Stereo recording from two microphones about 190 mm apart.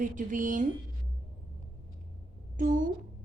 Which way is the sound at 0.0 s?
45° right (ahead or behind).